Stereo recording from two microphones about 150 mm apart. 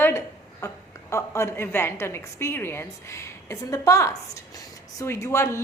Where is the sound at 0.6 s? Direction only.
20° left (ahead or behind).